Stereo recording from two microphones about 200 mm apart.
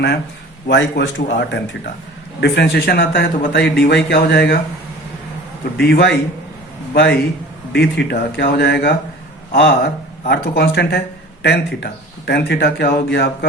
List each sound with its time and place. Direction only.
0.7 s speech: 60° left (ahead or behind)
5.7 s speech: 55° left (ahead or behind)